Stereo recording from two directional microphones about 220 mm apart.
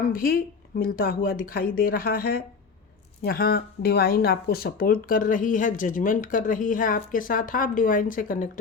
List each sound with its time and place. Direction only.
0.1 s speech: 40° left (ahead or behind)